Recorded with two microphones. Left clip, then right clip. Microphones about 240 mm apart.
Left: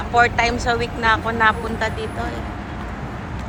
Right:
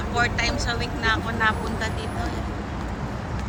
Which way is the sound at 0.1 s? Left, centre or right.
Centre.